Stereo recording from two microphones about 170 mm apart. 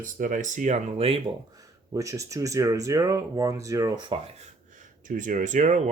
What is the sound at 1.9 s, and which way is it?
Speech, 20° right (ahead or behind).